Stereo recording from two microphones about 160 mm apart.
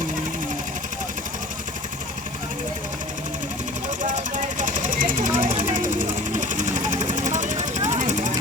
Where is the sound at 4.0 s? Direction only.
55° right (ahead or behind).